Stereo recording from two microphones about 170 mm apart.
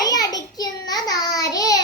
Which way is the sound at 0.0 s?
20° left (ahead or behind).